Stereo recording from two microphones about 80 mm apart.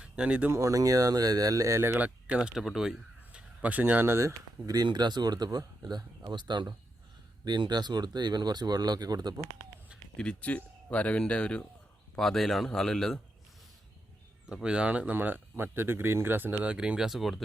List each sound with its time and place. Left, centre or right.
0.0 s speech: centre
0.5 s speech: right
1.8 s speech: right; by 2.9 s centre
3.3 s speech: centre; by 4.4 s right
4.6 s speech: right
10.2 s speech: centre
14.5 s speech: centre
16.6 s speech: centre